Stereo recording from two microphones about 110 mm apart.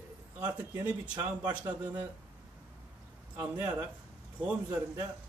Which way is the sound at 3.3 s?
20° right (ahead or behind).